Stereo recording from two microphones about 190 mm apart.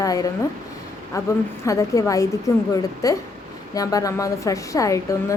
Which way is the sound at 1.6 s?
15° left (ahead or behind).